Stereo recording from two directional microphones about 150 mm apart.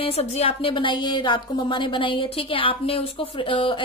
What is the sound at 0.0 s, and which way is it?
A woman's voice, 40° left (ahead or behind).